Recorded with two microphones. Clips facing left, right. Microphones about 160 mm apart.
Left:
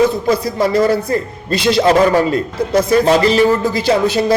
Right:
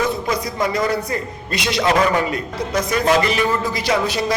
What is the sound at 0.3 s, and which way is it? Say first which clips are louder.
A man's voice: left 6 dB; 30° left (ahead or behind).